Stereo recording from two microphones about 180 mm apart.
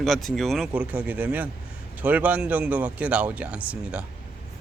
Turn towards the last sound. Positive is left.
turn(degrees=-5)  # may be behind; listen again after turning